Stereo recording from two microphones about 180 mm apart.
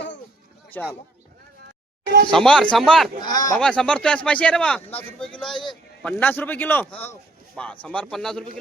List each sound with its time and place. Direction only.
0.7 s speech: 10° left (ahead or behind)
2.3 s speech: 5° left (ahead or behind)
3.2 s speech: 20° left (ahead or behind)
3.6 s a man's voice: 5° left (ahead or behind)